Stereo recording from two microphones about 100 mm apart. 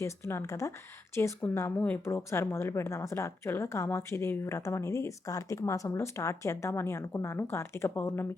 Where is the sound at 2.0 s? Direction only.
25° left (ahead or behind).